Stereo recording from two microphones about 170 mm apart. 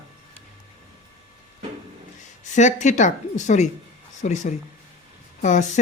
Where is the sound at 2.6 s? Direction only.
45° left (ahead or behind).